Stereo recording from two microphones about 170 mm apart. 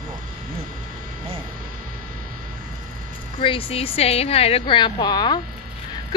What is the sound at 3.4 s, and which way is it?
A woman's voice, 30° left (ahead or behind).